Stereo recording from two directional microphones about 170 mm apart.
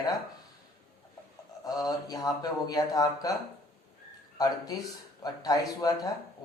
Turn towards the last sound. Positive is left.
turn(degrees=20)  # may be behind; listen again after turning